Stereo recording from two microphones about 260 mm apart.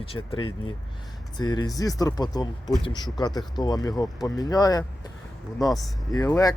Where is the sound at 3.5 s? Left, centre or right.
Centre.